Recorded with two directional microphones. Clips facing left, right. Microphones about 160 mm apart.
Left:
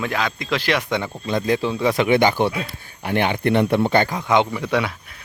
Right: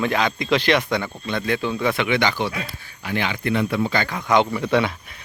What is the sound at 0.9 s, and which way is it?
Speech, 20° left (ahead or behind).